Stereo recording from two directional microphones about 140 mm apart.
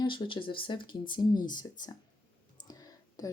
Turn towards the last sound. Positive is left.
turn(degrees=25)  # may be behind; listen again after turning